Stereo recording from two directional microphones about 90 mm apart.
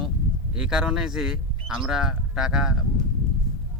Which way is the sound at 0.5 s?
5° right (ahead or behind).